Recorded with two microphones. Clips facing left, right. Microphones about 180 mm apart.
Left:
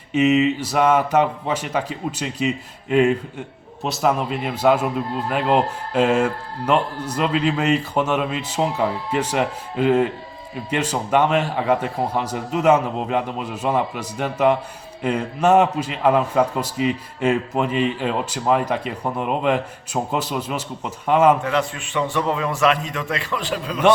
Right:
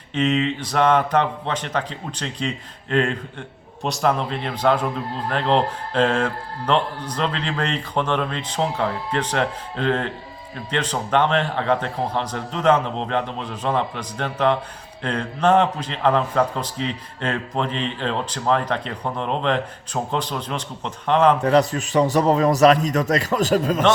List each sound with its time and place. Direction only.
0.1 s a man's voice: 5° left (ahead or behind)
21.4 s a man's voice: 40° right (ahead or behind)